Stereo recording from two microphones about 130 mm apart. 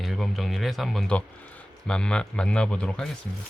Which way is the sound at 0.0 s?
Centre (ahead or behind).